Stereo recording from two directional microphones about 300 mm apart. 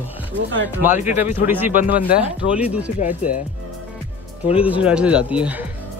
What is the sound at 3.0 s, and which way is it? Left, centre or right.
Speech, left.